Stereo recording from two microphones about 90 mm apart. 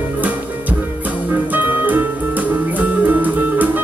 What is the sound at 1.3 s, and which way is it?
Music, 20° right (ahead or behind).